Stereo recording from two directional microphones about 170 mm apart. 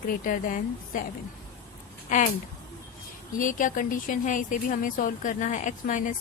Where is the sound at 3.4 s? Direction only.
50° left (ahead or behind).